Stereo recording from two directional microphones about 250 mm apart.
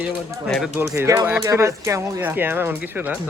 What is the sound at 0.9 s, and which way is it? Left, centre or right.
Speech, centre.